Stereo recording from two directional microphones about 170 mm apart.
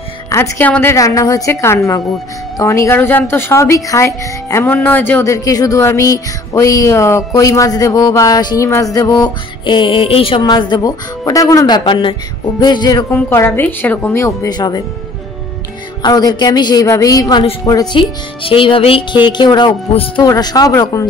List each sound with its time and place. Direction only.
0.3 s a woman's voice: 15° left (ahead or behind)
2.6 s music: 20° left (ahead or behind)
16.0 s music: 20° left (ahead or behind)